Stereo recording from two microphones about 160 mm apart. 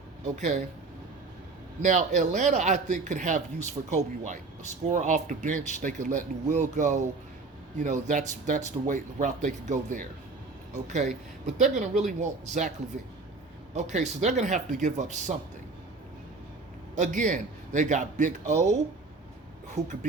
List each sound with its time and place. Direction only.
0.3 s speech: 45° right (ahead or behind)
1.8 s speech: 50° right (ahead or behind)
13.7 s speech: 45° right (ahead or behind)
16.9 s speech: 50° right (ahead or behind)